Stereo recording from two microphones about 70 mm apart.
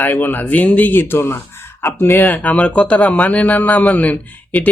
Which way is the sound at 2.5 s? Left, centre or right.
Centre.